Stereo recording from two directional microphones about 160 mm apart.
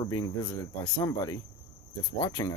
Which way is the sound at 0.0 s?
20° left (ahead or behind).